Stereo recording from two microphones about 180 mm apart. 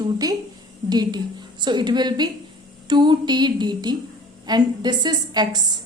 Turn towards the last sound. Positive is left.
turn(degrees=-25)  # may be behind; listen again after turning